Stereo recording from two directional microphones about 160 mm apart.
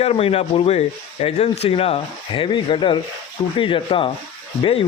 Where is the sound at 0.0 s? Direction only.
40° left (ahead or behind).